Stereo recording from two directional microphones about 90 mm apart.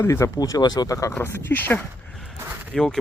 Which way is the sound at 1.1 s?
25° left (ahead or behind).